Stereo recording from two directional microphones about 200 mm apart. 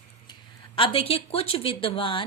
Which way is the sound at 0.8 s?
25° left (ahead or behind).